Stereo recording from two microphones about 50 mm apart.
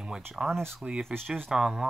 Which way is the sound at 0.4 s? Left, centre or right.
Right.